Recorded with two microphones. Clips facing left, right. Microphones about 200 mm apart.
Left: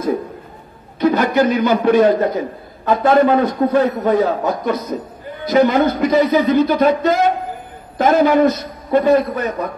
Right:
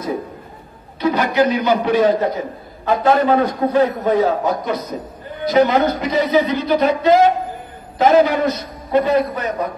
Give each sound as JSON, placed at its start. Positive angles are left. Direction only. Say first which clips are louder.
{"t": 1.0, "sound": "a man's voice", "louder": "left 2 dB", "side_deg": 50}